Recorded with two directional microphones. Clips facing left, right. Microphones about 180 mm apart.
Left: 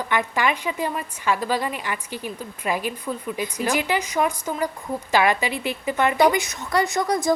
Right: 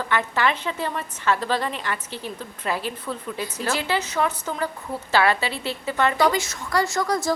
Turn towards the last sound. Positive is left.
turn(degrees=20)  # may be behind; listen again after turning